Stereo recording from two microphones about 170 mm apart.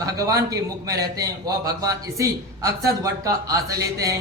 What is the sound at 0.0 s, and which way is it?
A man's voice, 20° right (ahead or behind).